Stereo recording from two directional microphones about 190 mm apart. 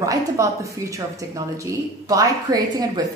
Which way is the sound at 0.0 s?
15° right (ahead or behind).